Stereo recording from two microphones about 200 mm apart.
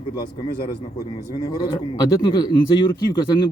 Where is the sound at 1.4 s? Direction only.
20° left (ahead or behind).